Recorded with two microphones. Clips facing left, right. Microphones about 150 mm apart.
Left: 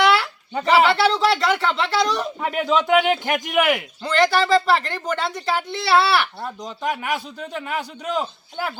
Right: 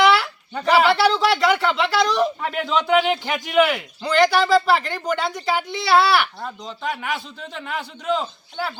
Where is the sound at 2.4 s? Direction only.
10° left (ahead or behind).